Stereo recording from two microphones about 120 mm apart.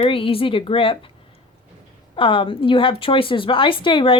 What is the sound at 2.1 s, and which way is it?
A woman's voice, 45° left (ahead or behind).